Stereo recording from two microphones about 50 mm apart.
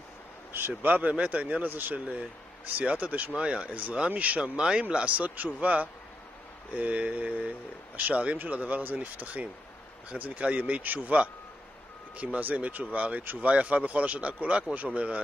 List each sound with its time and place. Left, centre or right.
0.5 s a man's voice: right
4.4 s a man's voice: centre